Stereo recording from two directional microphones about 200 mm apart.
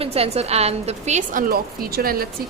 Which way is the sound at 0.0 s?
30° right (ahead or behind).